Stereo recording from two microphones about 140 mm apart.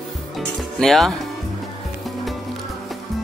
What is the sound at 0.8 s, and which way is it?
Speech, centre (ahead or behind).